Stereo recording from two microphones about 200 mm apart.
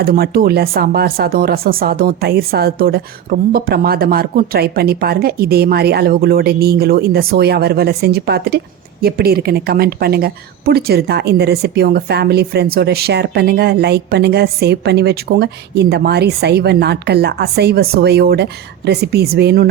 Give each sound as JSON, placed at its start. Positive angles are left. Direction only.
{"t": 0.0, "sound": "speech", "side_deg": -50}